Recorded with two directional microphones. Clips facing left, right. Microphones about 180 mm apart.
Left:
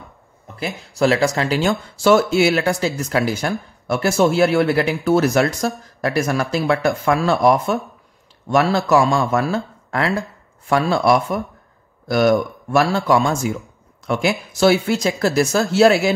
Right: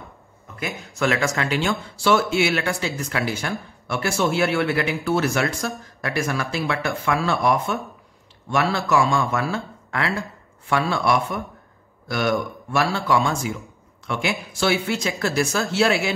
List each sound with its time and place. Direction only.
0.6 s speech: 35° left (ahead or behind)